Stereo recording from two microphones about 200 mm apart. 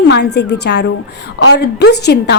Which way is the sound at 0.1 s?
55° left (ahead or behind).